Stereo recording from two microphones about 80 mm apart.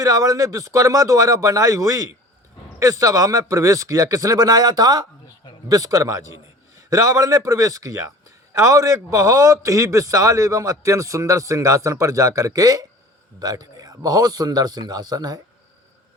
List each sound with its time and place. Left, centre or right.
0.0 s a man's voice: right